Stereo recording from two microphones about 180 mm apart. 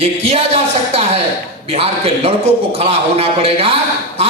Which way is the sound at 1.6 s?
35° right (ahead or behind).